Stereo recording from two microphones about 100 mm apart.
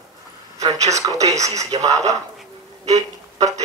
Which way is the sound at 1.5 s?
90° right.